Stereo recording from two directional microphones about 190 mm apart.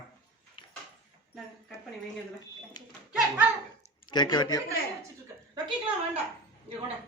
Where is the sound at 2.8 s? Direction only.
20° left (ahead or behind).